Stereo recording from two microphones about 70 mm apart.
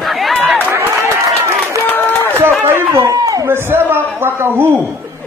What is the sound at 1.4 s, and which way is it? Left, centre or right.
Applause, right.